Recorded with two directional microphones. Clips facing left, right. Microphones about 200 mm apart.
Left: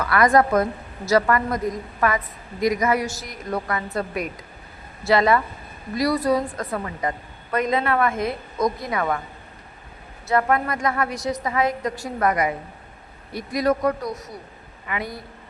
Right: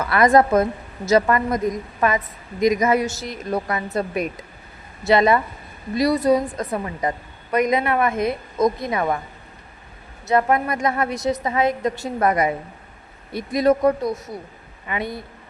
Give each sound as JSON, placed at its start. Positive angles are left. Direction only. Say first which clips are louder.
{"t": 0.0, "sound": "a woman's voice", "louder": "right 2 dB", "side_deg": -25}
{"t": 10.2, "sound": "a woman's voice", "louder": "right 2 dB", "side_deg": -20}